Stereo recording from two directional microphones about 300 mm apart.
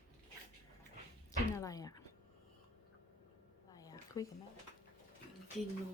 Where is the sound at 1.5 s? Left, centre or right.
Centre.